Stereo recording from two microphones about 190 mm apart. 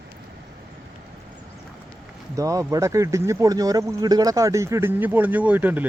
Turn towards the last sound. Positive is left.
turn(degrees=-10)  # may be behind; listen again after turning